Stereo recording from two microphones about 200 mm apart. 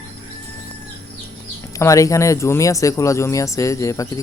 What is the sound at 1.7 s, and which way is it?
Speech, 15° left (ahead or behind).